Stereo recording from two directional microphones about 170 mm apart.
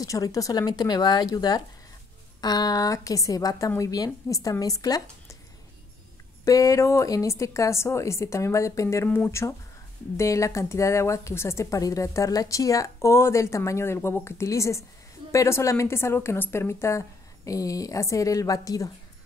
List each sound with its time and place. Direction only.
0.0 s speech: 20° left (ahead or behind)
6.4 s speech: 20° left (ahead or behind)